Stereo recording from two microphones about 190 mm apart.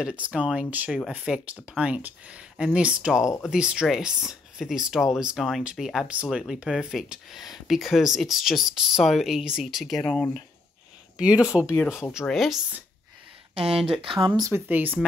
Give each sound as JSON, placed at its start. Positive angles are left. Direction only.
{"t": 0.0, "sound": "speech", "side_deg": -5}
{"t": 11.1, "sound": "speech", "side_deg": -5}
{"t": 13.6, "sound": "speech", "side_deg": -30}